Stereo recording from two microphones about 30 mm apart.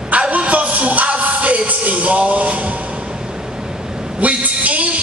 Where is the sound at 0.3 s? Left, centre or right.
Right.